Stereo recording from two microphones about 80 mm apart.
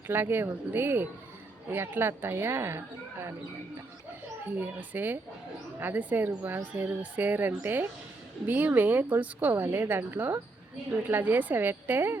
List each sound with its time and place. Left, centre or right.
0.1 s speech: right
4.6 s speech: right